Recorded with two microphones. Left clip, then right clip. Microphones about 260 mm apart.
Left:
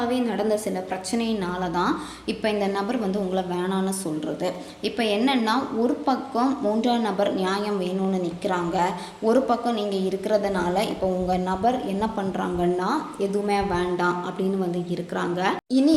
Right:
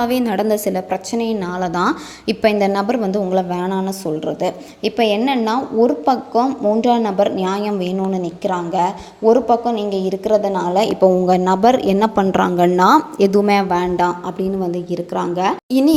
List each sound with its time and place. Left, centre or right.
0.0 s a woman's voice: right